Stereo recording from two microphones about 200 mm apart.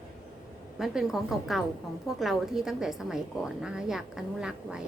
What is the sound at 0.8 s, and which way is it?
A woman's voice, centre (ahead or behind).